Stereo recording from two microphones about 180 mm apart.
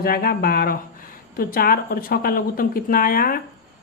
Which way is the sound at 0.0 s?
55° left (ahead or behind).